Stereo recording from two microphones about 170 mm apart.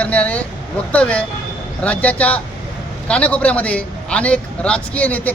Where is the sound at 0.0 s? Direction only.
10° left (ahead or behind).